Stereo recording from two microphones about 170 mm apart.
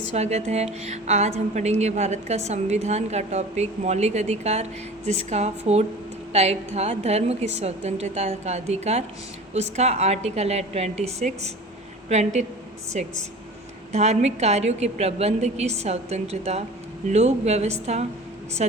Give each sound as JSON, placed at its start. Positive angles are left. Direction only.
{"t": 0.1, "sound": "a woman's voice", "side_deg": -40}